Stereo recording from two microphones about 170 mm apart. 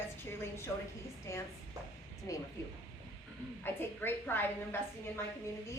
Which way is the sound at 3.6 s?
10° left (ahead or behind).